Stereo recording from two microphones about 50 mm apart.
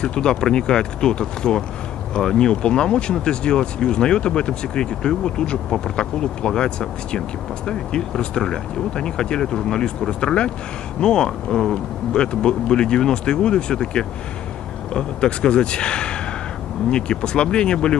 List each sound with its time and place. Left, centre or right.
0.0 s a man's voice: centre